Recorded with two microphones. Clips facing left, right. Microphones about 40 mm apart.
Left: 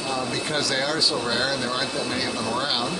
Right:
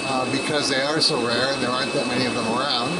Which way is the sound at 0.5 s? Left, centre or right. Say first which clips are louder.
Right 2 dB; centre.